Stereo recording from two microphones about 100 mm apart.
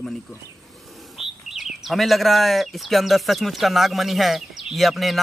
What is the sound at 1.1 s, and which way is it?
Speech, 5° right (ahead or behind).